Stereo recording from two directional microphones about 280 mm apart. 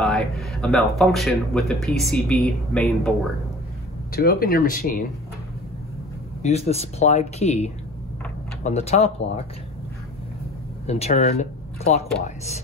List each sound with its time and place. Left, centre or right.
0.0 s speech: centre
4.1 s speech: left
6.4 s speech: left
10.9 s speech: left